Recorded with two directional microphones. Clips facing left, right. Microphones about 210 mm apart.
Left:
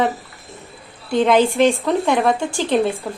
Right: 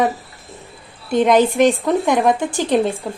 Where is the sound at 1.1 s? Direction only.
20° right (ahead or behind).